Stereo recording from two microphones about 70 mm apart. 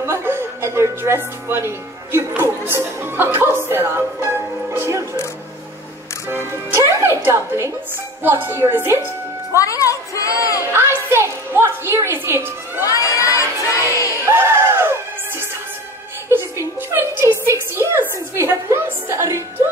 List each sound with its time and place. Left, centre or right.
0.0 s music: right
2.1 s speech: right
6.3 s speech: right
8.2 s a woman's voice: right
9.6 s speech: left
10.7 s a sound: right
11.5 s a woman's voice: right
12.8 s crowd: left
14.2 s a sound: right
16.3 s a sound: right
18.3 s speech: right